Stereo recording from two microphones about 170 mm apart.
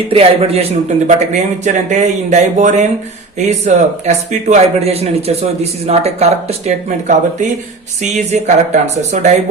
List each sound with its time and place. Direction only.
0.1 s speech: 35° right (ahead or behind)